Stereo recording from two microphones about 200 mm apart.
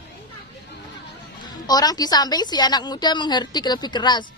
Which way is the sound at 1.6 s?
20° left (ahead or behind).